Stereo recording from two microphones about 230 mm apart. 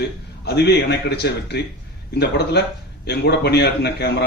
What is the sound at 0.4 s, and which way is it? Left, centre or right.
A man's voice, left.